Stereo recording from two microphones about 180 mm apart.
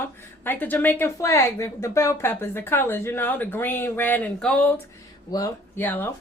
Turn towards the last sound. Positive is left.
turn(degrees=10)  # may be behind; listen again after turning